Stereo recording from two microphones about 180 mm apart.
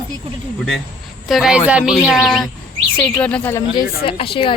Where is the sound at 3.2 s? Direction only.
10° left (ahead or behind).